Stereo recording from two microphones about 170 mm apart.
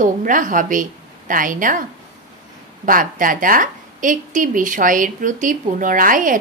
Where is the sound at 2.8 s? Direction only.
55° right (ahead or behind).